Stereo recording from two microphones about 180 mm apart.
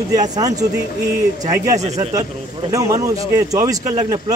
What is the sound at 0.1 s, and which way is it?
Speech, 20° right (ahead or behind).